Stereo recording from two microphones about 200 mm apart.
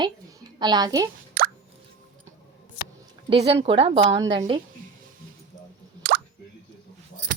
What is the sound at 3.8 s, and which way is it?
Speech, 30° right (ahead or behind).